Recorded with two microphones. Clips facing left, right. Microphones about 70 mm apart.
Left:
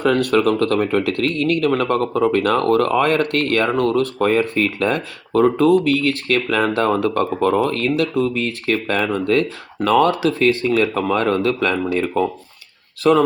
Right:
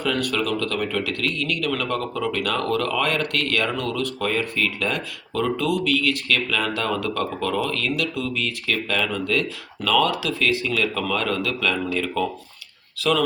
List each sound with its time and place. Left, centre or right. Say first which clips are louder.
0.0 s speech: left 8 dB; left